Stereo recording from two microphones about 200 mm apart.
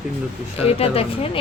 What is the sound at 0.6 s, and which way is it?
Speech, 30° left (ahead or behind).